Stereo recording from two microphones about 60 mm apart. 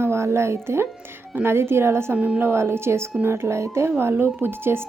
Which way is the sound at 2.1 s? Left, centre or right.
Right.